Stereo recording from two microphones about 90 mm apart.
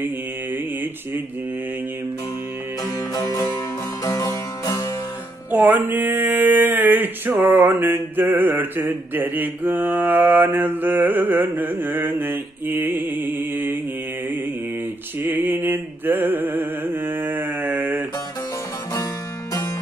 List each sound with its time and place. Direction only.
2.8 s music: 45° left (ahead or behind)
5.5 s a sound: 15° right (ahead or behind)
15.1 s music: 20° right (ahead or behind)